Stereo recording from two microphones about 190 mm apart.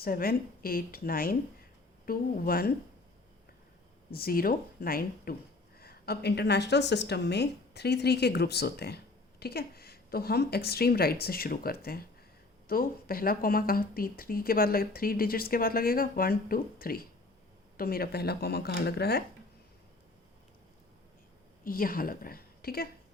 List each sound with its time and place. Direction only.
0.0 s speech: 50° left (ahead or behind)
4.1 s a woman's voice: 50° left (ahead or behind)
21.6 s a woman's voice: 50° left (ahead or behind)